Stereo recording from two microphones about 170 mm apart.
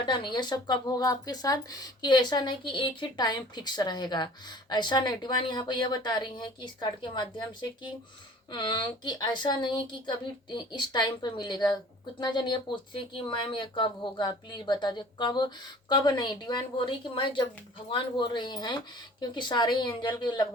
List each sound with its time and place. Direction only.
0.0 s speech: 25° left (ahead or behind)